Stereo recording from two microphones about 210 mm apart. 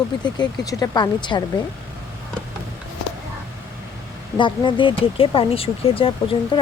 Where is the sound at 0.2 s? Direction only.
20° left (ahead or behind).